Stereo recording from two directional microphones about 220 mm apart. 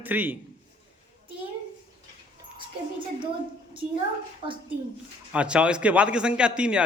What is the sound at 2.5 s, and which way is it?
Speech, 20° right (ahead or behind).